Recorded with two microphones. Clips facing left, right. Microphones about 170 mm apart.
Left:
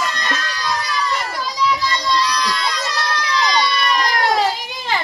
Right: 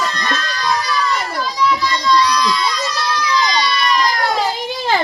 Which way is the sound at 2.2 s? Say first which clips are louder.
Right 4 dB; 55° left (ahead or behind).